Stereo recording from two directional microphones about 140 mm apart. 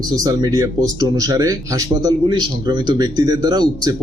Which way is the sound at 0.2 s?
30° right (ahead or behind).